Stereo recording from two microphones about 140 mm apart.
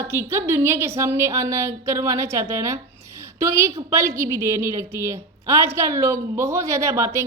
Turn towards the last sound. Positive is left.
turn(degrees=-20)  # may be behind; listen again after turning